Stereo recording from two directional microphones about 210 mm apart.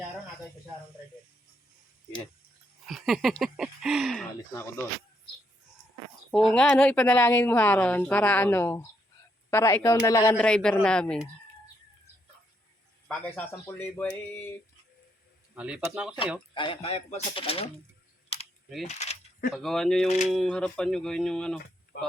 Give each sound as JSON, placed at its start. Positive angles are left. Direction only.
{"t": 2.8, "sound": "speech", "side_deg": 0}
{"t": 4.5, "sound": "speech", "side_deg": 15}
{"t": 6.3, "sound": "speech", "side_deg": 5}
{"t": 13.1, "sound": "speech", "side_deg": 5}
{"t": 15.5, "sound": "speech", "side_deg": -5}
{"t": 16.6, "sound": "speech", "side_deg": 25}
{"t": 18.9, "sound": "a sound", "side_deg": 35}
{"t": 19.5, "sound": "speech", "side_deg": 0}
{"t": 21.9, "sound": "speech", "side_deg": 50}